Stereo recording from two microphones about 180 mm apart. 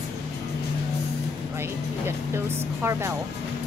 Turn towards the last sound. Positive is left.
turn(degrees=-15)  # may be behind; listen again after turning